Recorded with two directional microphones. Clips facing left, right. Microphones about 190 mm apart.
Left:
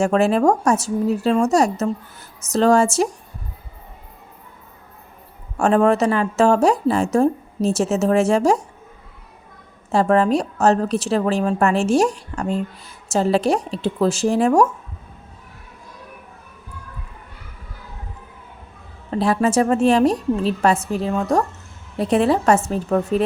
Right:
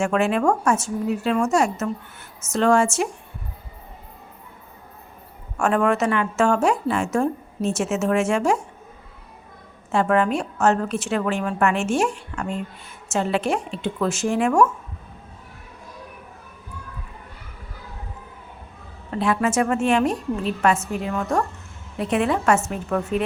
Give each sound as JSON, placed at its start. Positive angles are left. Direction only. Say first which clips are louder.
{"t": 0.0, "sound": "a woman's voice", "louder": "left 4 dB", "side_deg": 35}
{"t": 5.5, "sound": "a woman's voice", "louder": "left 4 dB", "side_deg": 35}
{"t": 9.9, "sound": "a woman's voice", "louder": "left 4 dB", "side_deg": 35}
{"t": 19.2, "sound": "a woman's voice", "louder": "left 3 dB", "side_deg": 35}